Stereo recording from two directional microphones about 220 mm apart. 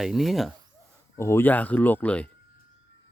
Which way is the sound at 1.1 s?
10° left (ahead or behind).